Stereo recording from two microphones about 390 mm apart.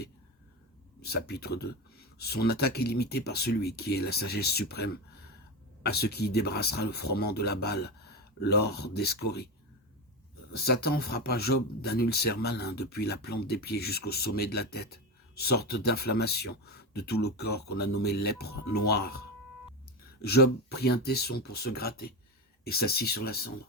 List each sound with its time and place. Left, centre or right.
1.1 s speech: left
10.5 s speech: left
20.2 s speech: left